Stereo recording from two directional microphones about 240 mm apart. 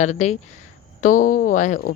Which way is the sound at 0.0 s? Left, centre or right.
Left.